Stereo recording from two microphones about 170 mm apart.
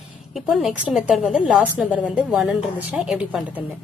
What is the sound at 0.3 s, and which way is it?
A woman's voice, centre (ahead or behind).